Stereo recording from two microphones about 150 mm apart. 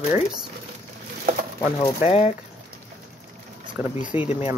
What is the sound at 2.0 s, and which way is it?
Speech, 45° left (ahead or behind).